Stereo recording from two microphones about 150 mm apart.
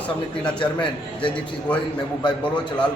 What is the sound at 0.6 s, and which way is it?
Speech, 35° left (ahead or behind).